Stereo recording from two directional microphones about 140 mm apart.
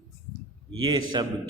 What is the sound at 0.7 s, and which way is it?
Speech, 35° right (ahead or behind).